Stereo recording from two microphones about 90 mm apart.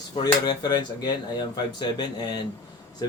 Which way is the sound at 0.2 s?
50° left (ahead or behind).